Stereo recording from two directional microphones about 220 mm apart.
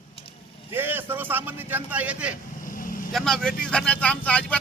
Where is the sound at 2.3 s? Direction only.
40° left (ahead or behind).